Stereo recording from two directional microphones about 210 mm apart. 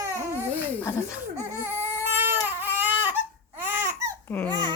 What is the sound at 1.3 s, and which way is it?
Baby cry, 10° right (ahead or behind).